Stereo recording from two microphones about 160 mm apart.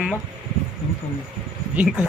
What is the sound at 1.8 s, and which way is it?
Speech, 5° right (ahead or behind).